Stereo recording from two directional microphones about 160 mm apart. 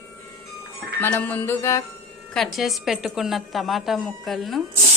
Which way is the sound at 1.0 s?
10° left (ahead or behind).